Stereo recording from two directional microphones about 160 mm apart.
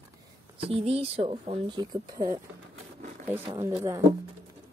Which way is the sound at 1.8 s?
25° right (ahead or behind).